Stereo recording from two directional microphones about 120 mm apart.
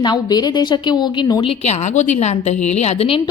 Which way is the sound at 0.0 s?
35° left (ahead or behind).